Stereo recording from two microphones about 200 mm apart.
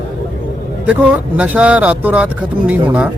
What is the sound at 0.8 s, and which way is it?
Speech, 5° right (ahead or behind).